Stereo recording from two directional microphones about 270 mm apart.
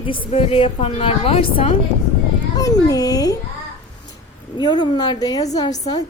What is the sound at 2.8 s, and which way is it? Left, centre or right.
Speech, centre.